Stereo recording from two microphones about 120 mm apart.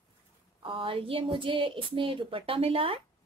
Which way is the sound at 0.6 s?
45° right (ahead or behind).